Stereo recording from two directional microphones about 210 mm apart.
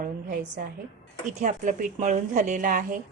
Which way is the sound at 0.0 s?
45° right (ahead or behind).